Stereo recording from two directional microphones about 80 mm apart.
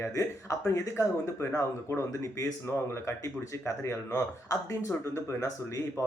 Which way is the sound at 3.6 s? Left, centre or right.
Left.